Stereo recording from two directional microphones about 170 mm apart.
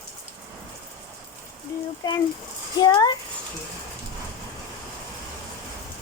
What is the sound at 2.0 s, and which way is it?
Speech, 20° left (ahead or behind).